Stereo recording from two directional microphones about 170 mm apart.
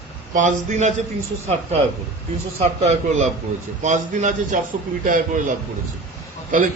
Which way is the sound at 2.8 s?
40° right (ahead or behind).